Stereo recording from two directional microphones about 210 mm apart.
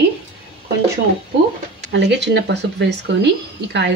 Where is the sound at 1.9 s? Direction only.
55° right (ahead or behind).